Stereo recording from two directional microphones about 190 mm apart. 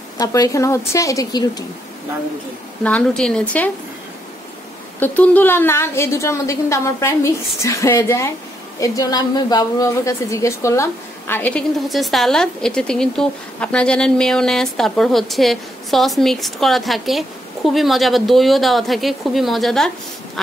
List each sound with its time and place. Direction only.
0.2 s a woman's voice: 20° left (ahead or behind)
2.8 s a woman's voice: 5° left (ahead or behind)
5.0 s a woman's voice: 10° left (ahead or behind)